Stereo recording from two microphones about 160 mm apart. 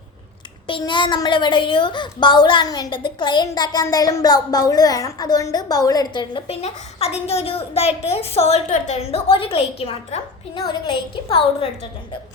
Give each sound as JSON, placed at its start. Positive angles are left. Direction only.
{"t": 0.7, "sound": "a woman's voice", "side_deg": 30}